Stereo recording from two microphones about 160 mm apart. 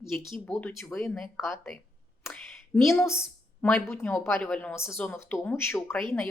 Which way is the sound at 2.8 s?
Centre (ahead or behind).